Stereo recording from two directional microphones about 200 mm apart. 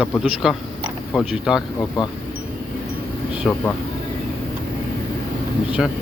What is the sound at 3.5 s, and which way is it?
Speech, 5° left (ahead or behind).